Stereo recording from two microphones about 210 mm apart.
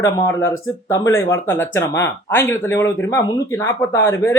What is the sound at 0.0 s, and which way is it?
Speech, 15° left (ahead or behind).